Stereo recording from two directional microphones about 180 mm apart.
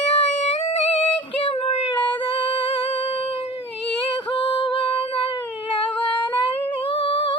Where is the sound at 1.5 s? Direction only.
35° left (ahead or behind).